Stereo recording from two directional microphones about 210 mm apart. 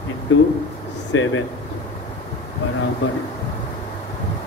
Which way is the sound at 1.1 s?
75° left (ahead or behind).